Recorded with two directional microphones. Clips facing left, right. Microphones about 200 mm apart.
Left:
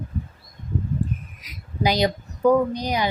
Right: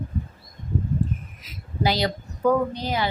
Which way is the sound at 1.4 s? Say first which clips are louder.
Even; 15° left (ahead or behind).